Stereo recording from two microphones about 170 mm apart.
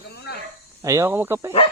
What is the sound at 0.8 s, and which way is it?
Speech, 15° right (ahead or behind).